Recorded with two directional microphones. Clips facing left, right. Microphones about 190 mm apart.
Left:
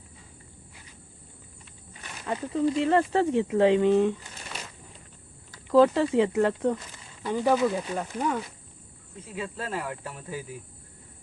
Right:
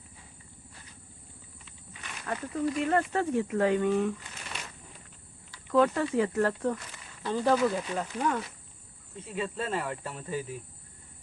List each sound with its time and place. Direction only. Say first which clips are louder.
2.2 s speech: left 5 dB; 20° left (ahead or behind)
5.5 s speech: left 5 dB; 30° left (ahead or behind)
7.9 s speech: left 1 dB; 5° left (ahead or behind)